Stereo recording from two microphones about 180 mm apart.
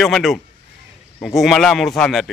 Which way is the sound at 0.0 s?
Centre (ahead or behind).